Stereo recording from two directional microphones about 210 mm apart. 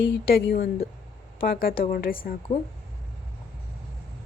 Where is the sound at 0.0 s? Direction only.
45° left (ahead or behind).